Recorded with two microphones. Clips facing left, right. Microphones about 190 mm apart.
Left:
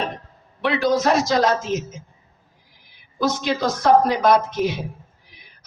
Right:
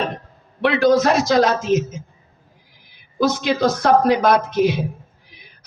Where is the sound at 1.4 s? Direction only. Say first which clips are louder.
Right 3 dB; 60° right (ahead or behind).